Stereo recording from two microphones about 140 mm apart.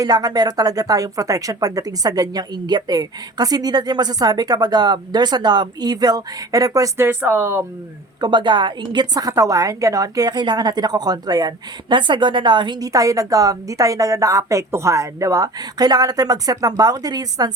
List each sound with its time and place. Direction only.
0.0 s a woman's voice: 30° right (ahead or behind)
8.2 s a woman's voice: 35° right (ahead or behind)